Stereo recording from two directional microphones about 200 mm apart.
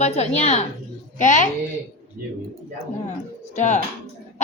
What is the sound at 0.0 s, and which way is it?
A woman's voice, 30° left (ahead or behind).